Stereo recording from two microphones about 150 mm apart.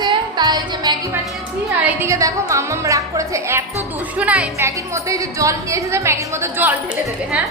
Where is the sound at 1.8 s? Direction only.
20° right (ahead or behind).